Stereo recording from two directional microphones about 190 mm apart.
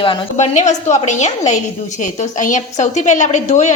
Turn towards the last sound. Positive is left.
turn(degrees=40)  # may be behind; listen again after turning